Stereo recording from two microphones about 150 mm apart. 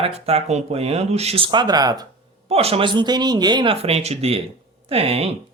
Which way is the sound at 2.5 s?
40° right (ahead or behind).